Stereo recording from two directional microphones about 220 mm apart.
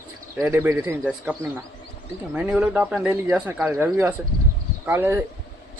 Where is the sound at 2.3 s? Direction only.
5° right (ahead or behind).